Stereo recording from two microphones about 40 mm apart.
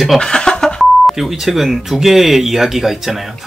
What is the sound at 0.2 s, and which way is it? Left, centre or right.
Beep, left.